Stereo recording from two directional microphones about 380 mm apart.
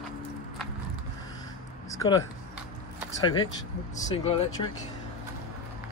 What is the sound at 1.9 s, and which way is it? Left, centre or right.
Speech, centre.